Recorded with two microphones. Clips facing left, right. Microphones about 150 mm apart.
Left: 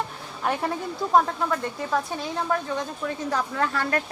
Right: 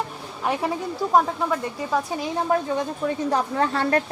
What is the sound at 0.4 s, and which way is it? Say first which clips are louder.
A woman's voice: right 2 dB; 5° right (ahead or behind).